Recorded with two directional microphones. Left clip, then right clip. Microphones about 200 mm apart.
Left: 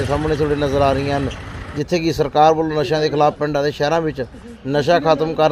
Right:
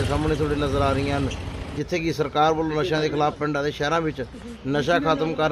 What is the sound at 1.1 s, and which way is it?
Vehicle, centre (ahead or behind).